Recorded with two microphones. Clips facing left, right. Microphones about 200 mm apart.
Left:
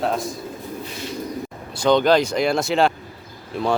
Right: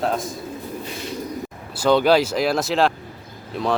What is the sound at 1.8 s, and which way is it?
Speech, 5° right (ahead or behind).